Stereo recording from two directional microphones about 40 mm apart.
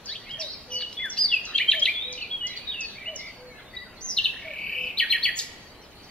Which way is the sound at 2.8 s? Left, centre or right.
Left.